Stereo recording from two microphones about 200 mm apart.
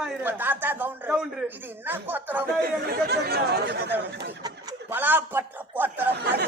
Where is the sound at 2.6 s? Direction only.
50° right (ahead or behind).